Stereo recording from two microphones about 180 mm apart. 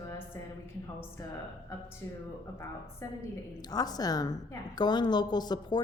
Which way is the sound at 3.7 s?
20° left (ahead or behind).